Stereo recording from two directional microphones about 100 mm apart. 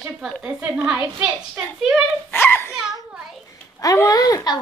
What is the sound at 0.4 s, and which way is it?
Speech, 10° right (ahead or behind).